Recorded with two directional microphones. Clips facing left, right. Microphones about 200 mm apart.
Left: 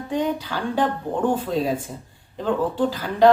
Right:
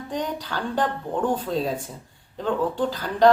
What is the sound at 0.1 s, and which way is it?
Speech, 10° left (ahead or behind).